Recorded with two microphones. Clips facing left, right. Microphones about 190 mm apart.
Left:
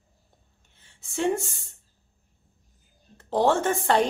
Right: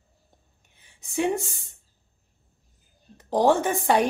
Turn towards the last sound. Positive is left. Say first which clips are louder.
# right 1 dB
turn(degrees=-15)  # may be behind; listen again after turning